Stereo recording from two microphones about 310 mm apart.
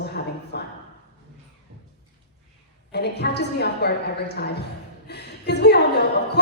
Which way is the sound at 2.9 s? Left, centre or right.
Left.